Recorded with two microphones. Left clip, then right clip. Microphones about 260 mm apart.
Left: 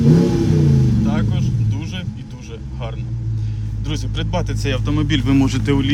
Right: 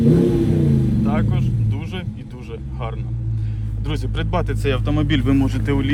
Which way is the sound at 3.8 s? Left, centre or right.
Centre.